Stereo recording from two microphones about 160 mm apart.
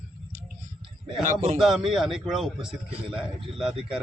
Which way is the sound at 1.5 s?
5° right (ahead or behind).